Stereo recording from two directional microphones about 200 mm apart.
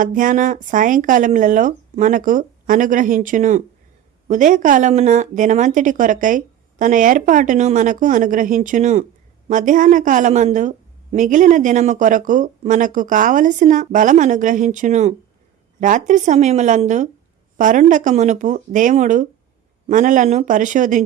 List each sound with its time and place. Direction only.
0.0 s a woman's voice: 40° right (ahead or behind)